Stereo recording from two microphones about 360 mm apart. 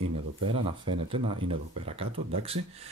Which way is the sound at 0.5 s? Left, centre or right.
Centre.